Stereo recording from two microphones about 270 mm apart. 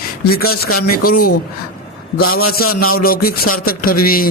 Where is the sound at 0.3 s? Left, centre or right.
Left.